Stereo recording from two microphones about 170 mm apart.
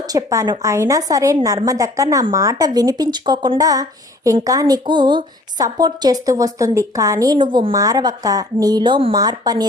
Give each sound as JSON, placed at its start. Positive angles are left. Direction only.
{"t": 0.1, "sound": "speech", "side_deg": -20}